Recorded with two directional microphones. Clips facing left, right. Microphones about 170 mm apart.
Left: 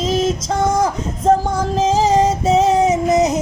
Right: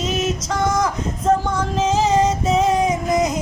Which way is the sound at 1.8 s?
30° left (ahead or behind).